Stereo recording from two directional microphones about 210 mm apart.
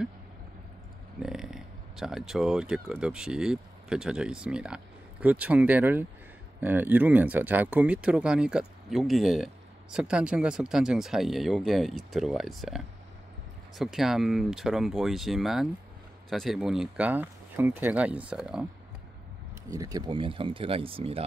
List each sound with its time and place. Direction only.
1.2 s speech: centre (ahead or behind)
19.7 s speech: 15° right (ahead or behind)